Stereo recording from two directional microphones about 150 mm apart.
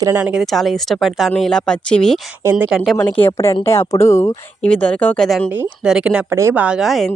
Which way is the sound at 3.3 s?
20° left (ahead or behind).